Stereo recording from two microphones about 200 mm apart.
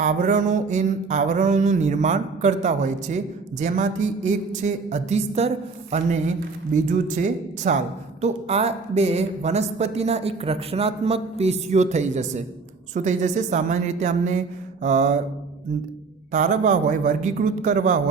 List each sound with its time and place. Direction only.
0.0 s speech: 40° right (ahead or behind)
6.9 s speech: 40° right (ahead or behind)
16.3 s speech: 40° right (ahead or behind)